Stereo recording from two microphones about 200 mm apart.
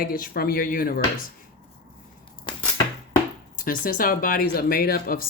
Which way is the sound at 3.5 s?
45° left (ahead or behind).